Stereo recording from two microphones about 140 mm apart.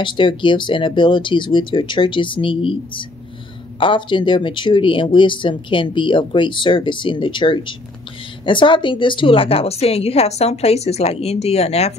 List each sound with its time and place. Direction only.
0.0 s a woman's voice: 35° left (ahead or behind)